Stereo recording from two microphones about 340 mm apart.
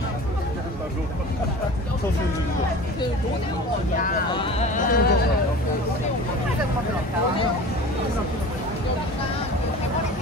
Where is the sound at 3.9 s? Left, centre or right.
Centre.